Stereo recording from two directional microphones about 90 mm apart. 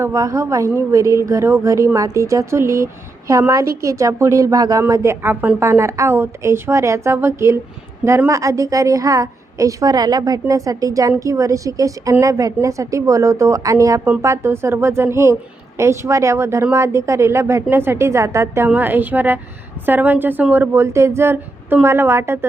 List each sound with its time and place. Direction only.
0.0 s a woman's voice: 35° right (ahead or behind)
4.8 s speech: 30° right (ahead or behind)
5.3 s speech: 20° right (ahead or behind)
5.6 s a woman's voice: 30° right (ahead or behind)
18.7 s speech: 20° right (ahead or behind)